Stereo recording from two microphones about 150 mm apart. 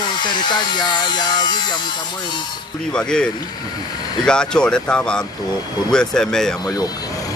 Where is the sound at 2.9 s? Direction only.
5° left (ahead or behind).